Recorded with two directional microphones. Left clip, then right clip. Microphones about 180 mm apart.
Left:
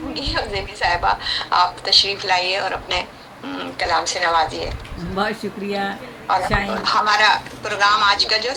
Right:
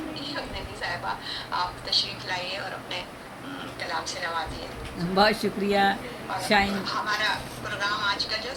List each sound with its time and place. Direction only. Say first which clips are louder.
0.1 s a woman's voice: left 10 dB; 50° left (ahead or behind)
5.1 s speech: right 1 dB; centre (ahead or behind)
6.3 s a woman's voice: left 5 dB; 50° left (ahead or behind)